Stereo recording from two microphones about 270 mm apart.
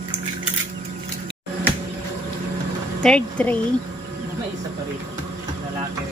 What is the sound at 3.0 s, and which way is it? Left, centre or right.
Speech, centre.